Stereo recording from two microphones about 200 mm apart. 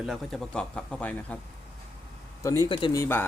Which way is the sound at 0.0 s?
Centre (ahead or behind).